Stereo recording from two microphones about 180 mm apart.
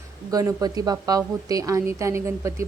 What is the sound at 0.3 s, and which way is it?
A woman's voice, 20° right (ahead or behind).